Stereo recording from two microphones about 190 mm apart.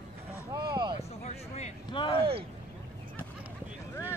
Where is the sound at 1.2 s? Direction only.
35° left (ahead or behind).